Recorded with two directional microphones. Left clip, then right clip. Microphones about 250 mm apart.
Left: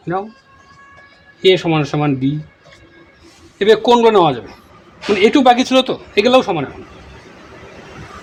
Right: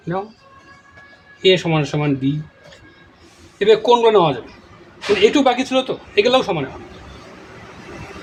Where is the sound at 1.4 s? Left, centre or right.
Left.